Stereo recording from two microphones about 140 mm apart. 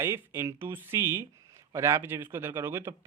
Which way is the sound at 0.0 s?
15° right (ahead or behind).